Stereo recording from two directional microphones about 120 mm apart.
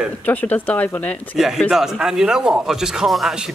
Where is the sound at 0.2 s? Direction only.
15° left (ahead or behind).